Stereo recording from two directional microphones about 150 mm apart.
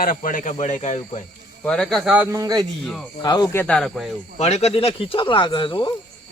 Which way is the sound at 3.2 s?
30° left (ahead or behind).